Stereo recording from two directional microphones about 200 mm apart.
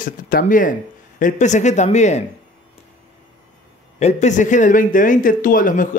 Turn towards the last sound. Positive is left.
turn(degrees=40)  # may be behind; listen again after turning